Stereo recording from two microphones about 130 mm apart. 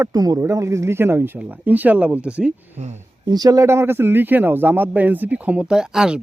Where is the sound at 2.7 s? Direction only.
60° right (ahead or behind).